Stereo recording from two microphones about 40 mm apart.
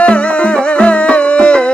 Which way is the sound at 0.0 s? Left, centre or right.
Left.